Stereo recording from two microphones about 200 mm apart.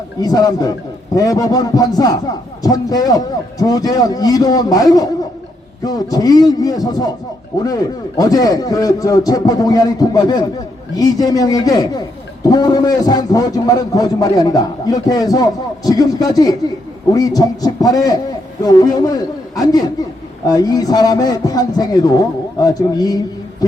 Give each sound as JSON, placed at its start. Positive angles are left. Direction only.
{"t": 0.2, "sound": "a man's voice", "side_deg": 20}